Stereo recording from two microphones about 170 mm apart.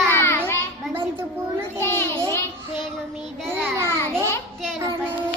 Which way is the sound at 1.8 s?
15° left (ahead or behind).